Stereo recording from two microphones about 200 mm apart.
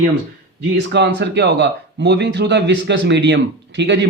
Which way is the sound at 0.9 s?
60° right (ahead or behind).